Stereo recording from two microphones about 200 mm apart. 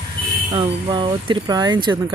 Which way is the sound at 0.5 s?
25° right (ahead or behind).